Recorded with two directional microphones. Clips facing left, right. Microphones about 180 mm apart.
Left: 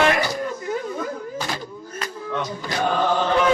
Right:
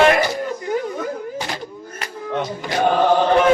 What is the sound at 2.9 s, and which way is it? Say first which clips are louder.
Chant: right 5 dB; 45° right (ahead or behind).